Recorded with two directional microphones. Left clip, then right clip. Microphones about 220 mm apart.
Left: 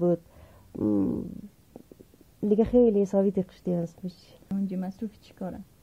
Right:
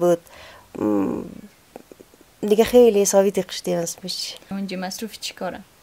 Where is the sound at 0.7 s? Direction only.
20° right (ahead or behind).